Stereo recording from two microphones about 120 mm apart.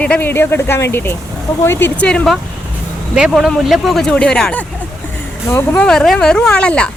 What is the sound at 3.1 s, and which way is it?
Speech, 5° right (ahead or behind).